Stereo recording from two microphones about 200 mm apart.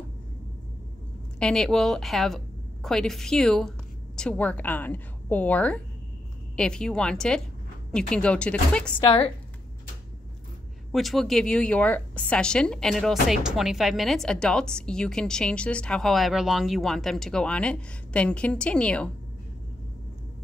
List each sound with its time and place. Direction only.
1.4 s a woman's voice: 5° left (ahead or behind)
9.0 s speech: 25° left (ahead or behind)
10.9 s a woman's voice: centre (ahead or behind)